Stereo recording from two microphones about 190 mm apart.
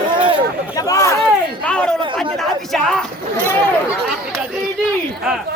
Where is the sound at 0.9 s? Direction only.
15° left (ahead or behind).